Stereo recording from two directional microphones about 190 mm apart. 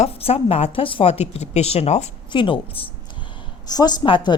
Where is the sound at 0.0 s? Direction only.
30° left (ahead or behind).